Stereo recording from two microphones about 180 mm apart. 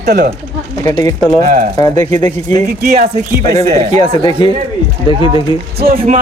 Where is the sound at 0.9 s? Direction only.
15° left (ahead or behind).